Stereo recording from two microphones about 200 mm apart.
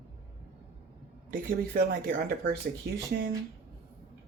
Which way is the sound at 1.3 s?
45° right (ahead or behind).